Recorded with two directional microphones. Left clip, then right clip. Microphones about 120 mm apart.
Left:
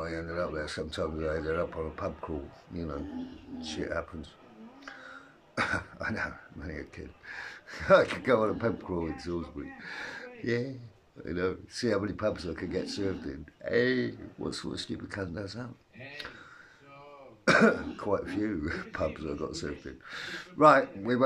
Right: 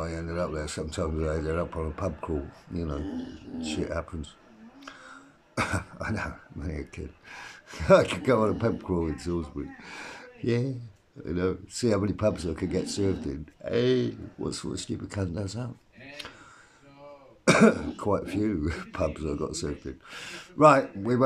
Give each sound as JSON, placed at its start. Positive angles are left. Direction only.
{"t": 0.0, "sound": "speech", "side_deg": -15}
{"t": 17.5, "sound": "speech", "side_deg": -20}